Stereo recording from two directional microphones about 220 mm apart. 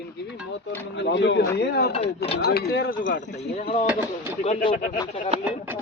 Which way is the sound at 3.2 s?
30° left (ahead or behind).